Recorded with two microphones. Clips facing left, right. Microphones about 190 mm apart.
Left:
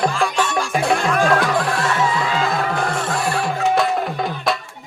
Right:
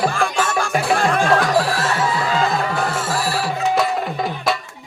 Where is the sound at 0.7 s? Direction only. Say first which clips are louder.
Left 2 dB; centre (ahead or behind).